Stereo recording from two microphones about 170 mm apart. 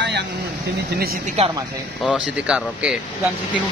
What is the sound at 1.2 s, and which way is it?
Speech, 40° right (ahead or behind).